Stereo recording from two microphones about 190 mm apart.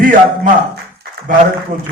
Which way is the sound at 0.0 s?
45° right (ahead or behind).